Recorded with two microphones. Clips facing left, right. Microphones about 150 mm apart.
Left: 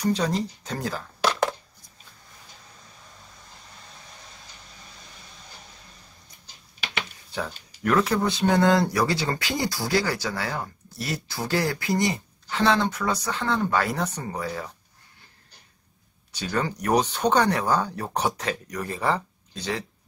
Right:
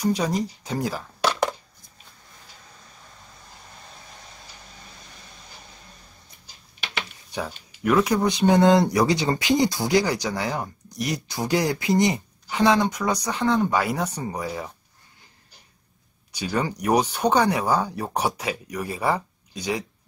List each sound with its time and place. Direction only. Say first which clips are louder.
0.0 s speech: right 1 dB; 10° right (ahead or behind)
7.8 s speech: right 2 dB; 10° right (ahead or behind)
16.3 s speech: right 2 dB; 10° right (ahead or behind)